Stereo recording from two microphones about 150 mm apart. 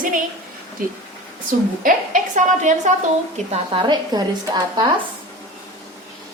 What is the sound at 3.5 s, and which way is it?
Speech, 35° right (ahead or behind).